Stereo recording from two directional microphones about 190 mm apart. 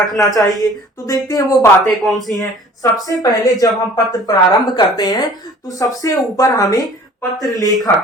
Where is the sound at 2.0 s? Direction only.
Centre (ahead or behind).